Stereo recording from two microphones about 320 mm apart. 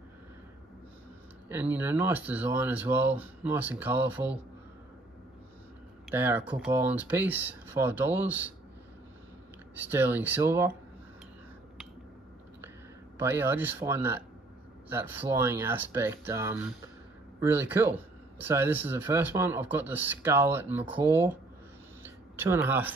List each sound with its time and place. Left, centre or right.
1.5 s speech: centre
6.1 s speech: centre
9.8 s speech: centre
13.2 s speech: centre
22.0 s a sound: centre